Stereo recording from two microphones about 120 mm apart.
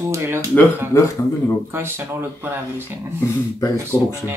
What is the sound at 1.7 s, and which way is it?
Speech, 20° right (ahead or behind).